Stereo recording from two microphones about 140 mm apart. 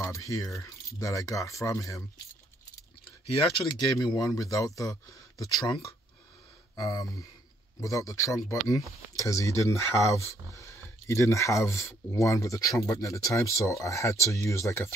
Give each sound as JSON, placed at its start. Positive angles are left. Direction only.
{"t": 0.0, "sound": "speech", "side_deg": 25}
{"t": 3.3, "sound": "speech", "side_deg": 40}